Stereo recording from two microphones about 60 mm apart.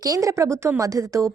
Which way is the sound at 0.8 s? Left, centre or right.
Right.